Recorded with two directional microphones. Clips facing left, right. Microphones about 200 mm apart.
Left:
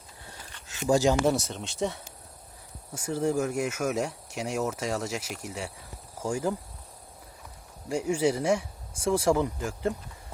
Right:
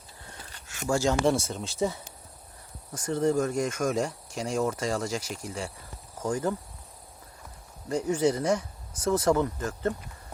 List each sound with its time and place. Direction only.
0.9 s speech: 15° left (ahead or behind)
1.2 s speech: centre (ahead or behind)
7.9 s speech: 10° left (ahead or behind)